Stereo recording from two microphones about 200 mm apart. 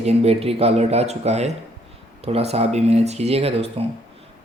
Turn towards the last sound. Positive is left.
turn(degrees=-30)  # may be behind; listen again after turning